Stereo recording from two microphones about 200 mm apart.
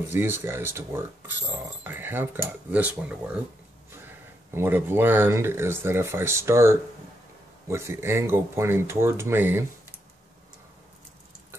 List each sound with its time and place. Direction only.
0.1 s speech: 10° right (ahead or behind)
4.5 s speech: 10° right (ahead or behind)